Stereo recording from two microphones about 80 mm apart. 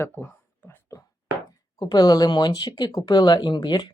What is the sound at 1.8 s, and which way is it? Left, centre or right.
Speech, left.